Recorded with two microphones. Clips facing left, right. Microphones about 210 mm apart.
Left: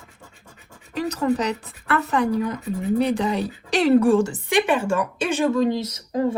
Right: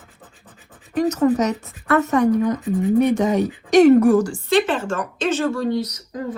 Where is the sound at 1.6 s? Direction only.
30° left (ahead or behind).